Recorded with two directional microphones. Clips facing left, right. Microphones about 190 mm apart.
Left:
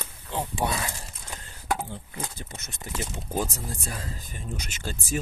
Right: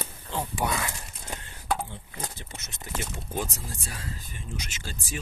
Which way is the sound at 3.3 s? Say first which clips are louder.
Left 4 dB; 40° left (ahead or behind).